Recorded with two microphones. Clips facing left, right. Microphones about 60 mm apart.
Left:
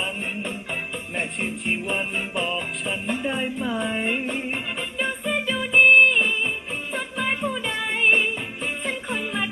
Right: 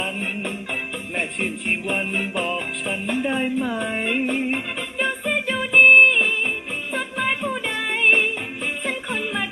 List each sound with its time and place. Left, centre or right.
0.0 s music: right
7.9 s music: right